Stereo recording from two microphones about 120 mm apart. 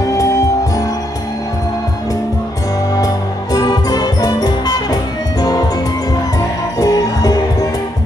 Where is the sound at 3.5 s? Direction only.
35° left (ahead or behind).